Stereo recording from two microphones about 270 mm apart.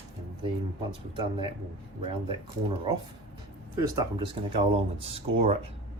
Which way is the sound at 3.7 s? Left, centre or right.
Centre.